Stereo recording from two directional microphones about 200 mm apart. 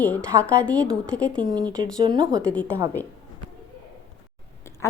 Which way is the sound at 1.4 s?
20° right (ahead or behind).